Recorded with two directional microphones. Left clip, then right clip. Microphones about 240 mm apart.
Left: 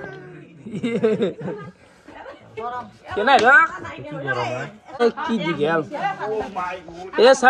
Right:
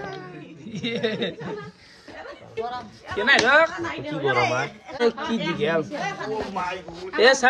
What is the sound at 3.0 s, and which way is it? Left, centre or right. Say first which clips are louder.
Speech: left 4 dB; centre.